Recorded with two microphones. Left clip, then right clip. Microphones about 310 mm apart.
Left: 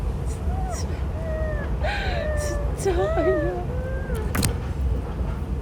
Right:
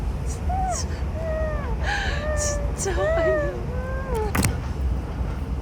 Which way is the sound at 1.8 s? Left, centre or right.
Centre.